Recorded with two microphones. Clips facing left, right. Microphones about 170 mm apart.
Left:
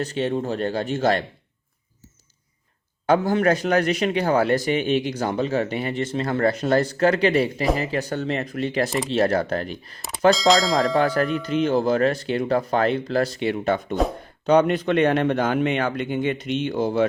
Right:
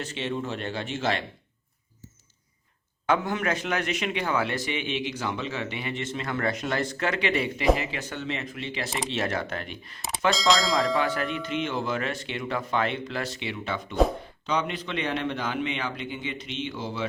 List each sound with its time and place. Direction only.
0.0 s a man's voice: 40° left (ahead or behind)
3.1 s a man's voice: 35° left (ahead or behind)
10.3 s speech: centre (ahead or behind)
11.0 s a man's voice: 40° left (ahead or behind)